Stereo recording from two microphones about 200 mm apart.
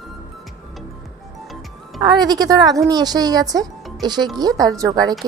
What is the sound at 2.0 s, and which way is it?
Speech, 20° right (ahead or behind).